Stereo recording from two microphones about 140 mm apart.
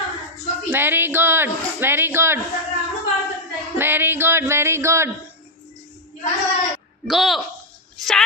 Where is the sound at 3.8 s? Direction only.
15° right (ahead or behind).